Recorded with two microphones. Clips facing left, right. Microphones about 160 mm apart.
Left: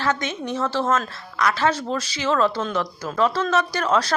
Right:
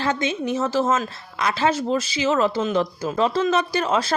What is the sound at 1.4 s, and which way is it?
Speech, 20° right (ahead or behind).